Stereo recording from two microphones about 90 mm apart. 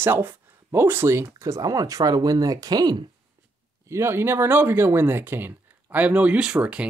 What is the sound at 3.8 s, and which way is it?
Speech, 30° right (ahead or behind).